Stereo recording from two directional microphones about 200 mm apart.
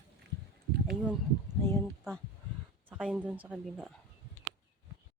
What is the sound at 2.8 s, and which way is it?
Speech, 5° right (ahead or behind).